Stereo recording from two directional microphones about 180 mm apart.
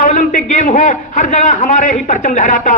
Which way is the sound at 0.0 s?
45° left (ahead or behind).